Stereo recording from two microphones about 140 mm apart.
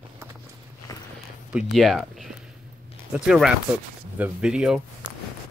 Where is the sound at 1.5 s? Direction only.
5° right (ahead or behind).